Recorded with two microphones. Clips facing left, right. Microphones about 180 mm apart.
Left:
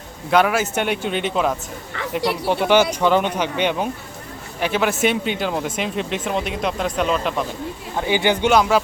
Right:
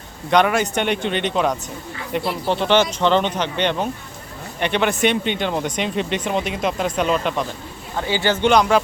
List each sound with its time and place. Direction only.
0.3 s speech: 5° left (ahead or behind)
8.0 s speech: 15° left (ahead or behind)